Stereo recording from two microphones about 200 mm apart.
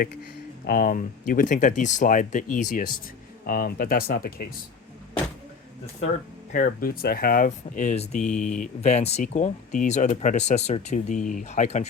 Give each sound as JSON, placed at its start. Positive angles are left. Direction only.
{"t": 0.6, "sound": "speech", "side_deg": 45}
{"t": 6.5, "sound": "speech", "side_deg": 45}
{"t": 8.2, "sound": "speech", "side_deg": 5}
{"t": 8.5, "sound": "speech", "side_deg": 40}